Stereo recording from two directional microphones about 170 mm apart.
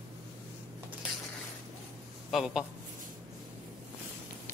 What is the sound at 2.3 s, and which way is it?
Speech, centre (ahead or behind).